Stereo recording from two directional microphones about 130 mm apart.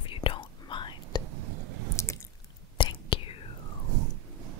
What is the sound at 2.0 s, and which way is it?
Drip, 20° left (ahead or behind).